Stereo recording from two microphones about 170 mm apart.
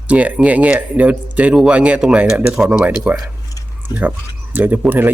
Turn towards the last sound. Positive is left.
turn(degrees=-10)  # may be behind; listen again after turning